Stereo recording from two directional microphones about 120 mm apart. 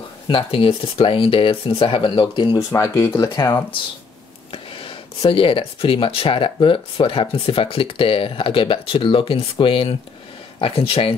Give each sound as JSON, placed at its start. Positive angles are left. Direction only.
{"t": 0.3, "sound": "speech", "side_deg": 50}
{"t": 2.7, "sound": "speech", "side_deg": 25}
{"t": 4.5, "sound": "speech", "side_deg": 50}